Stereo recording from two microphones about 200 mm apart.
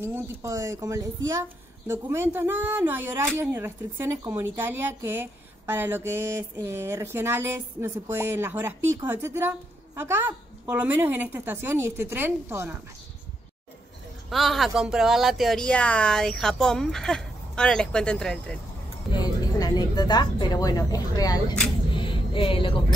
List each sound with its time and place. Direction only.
0.0 s speech: 10° right (ahead or behind)
14.3 s speech: centre (ahead or behind)
19.1 s speech: 20° left (ahead or behind)
21.9 s music: 25° left (ahead or behind)